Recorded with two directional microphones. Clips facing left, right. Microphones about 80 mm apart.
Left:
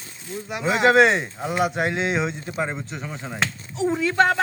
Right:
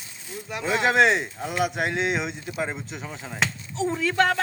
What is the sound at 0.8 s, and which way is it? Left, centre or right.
Speech, centre.